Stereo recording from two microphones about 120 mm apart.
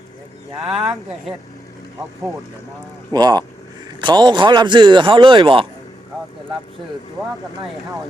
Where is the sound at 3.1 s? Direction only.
35° right (ahead or behind).